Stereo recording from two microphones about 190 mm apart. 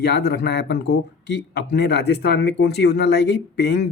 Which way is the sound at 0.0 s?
60° left (ahead or behind).